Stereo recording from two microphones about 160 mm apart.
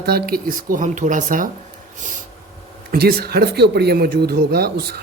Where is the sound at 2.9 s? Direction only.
80° right.